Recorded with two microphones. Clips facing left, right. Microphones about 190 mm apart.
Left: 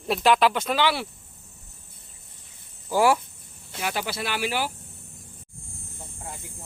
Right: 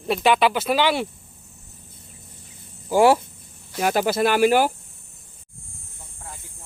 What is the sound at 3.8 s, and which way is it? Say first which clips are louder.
Speech: right 10 dB; 45° right (ahead or behind).